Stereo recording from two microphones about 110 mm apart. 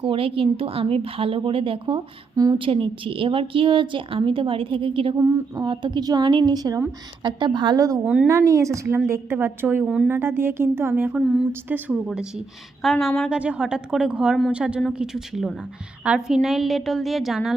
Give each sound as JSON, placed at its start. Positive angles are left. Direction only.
{"t": 0.0, "sound": "a woman's voice", "side_deg": -55}
{"t": 2.3, "sound": "a woman's voice", "side_deg": -35}
{"t": 2.6, "sound": "a woman's voice", "side_deg": -55}
{"t": 5.2, "sound": "a woman's voice", "side_deg": -40}
{"t": 8.0, "sound": "speech", "side_deg": -10}
{"t": 8.3, "sound": "speech", "side_deg": -30}
{"t": 9.8, "sound": "a woman's voice", "side_deg": -5}
{"t": 10.1, "sound": "speech", "side_deg": -20}
{"t": 11.2, "sound": "a woman's voice", "side_deg": -5}